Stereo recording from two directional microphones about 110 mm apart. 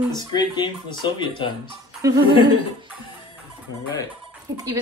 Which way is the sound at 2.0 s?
30° right (ahead or behind).